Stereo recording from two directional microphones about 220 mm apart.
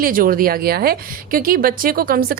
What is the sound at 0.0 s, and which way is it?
A woman's voice, 40° right (ahead or behind).